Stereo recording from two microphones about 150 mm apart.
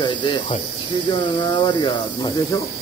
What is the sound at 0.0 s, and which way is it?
Speech, 30° left (ahead or behind).